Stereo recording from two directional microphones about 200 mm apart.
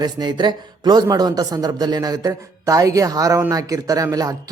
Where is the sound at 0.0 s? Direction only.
20° right (ahead or behind).